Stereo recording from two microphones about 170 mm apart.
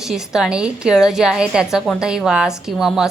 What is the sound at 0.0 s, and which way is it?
A woman's voice, centre (ahead or behind).